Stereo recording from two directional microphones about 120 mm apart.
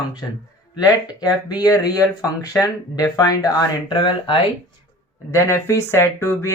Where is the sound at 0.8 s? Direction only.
35° left (ahead or behind).